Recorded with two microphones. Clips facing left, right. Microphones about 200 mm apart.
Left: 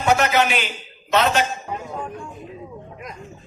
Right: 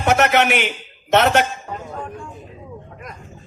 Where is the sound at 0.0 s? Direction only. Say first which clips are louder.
Right 2 dB; 65° right (ahead or behind).